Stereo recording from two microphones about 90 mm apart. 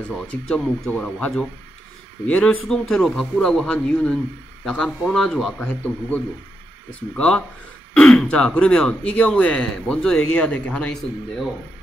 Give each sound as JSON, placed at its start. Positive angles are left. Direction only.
{"t": 0.1, "sound": "speech", "side_deg": 5}
{"t": 5.6, "sound": "a man's voice", "side_deg": 20}